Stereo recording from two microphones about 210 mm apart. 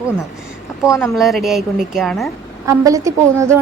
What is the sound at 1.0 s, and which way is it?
A woman's voice, centre (ahead or behind).